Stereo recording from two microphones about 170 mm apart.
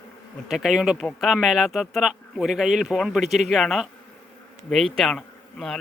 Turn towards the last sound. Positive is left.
turn(degrees=5)  # may be behind; listen again after turning